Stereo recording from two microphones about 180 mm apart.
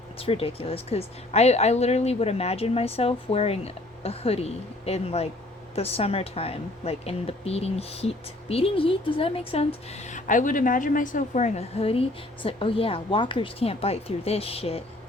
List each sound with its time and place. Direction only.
0.2 s a woman's voice: 30° left (ahead or behind)